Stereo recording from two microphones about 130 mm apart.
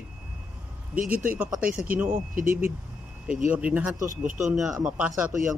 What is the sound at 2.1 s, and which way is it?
Speech, 90° right.